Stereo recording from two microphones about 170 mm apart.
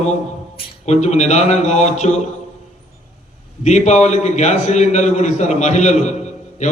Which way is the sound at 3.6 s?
40° left (ahead or behind).